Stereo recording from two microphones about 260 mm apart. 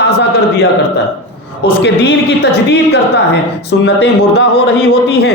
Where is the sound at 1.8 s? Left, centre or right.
Left.